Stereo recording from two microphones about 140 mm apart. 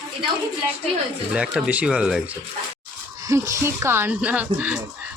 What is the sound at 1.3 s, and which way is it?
Speech, 5° right (ahead or behind).